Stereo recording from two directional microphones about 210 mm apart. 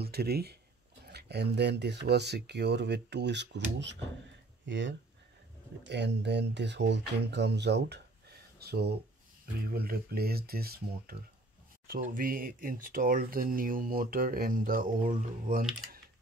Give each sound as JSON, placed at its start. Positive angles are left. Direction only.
{"t": 0.0, "sound": "speech", "side_deg": -50}